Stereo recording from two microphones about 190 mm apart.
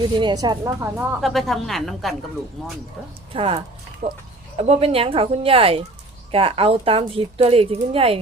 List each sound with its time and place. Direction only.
0.2 s speech: 25° right (ahead or behind)
1.2 s speech: centre (ahead or behind)
3.3 s speech: 30° right (ahead or behind)